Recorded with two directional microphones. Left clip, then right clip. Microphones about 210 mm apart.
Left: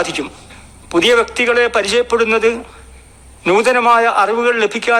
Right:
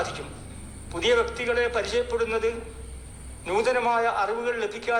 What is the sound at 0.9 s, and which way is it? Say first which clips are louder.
A man's voice: left 11 dB; 55° left (ahead or behind).